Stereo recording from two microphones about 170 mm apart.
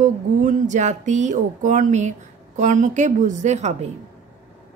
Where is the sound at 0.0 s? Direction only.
50° right (ahead or behind).